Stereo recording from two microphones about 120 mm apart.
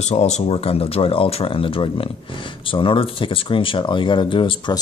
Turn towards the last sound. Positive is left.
turn(degrees=40)  # may be behind; listen again after turning